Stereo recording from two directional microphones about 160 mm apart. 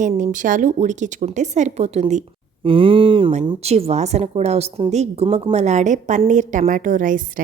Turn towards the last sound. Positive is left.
turn(degrees=-55)  # may be behind; listen again after turning